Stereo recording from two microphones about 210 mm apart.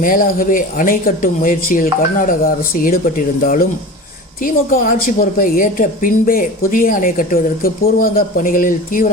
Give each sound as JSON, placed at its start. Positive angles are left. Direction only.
{"t": 0.0, "sound": "a woman's voice", "side_deg": 40}